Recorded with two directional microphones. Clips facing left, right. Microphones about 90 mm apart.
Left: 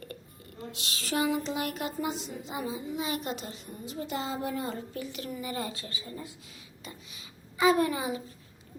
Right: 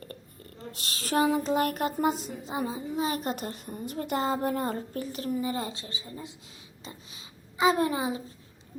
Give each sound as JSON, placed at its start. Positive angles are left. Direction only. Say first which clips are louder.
{"t": 0.7, "sound": "speech", "louder": "right 4 dB", "side_deg": -40}